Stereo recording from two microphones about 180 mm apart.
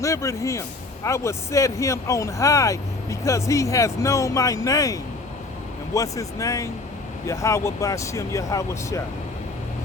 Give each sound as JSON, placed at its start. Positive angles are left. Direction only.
{"t": 0.0, "sound": "speech", "side_deg": 15}